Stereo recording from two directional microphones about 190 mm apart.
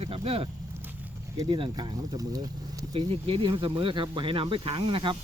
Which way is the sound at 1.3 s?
20° right (ahead or behind).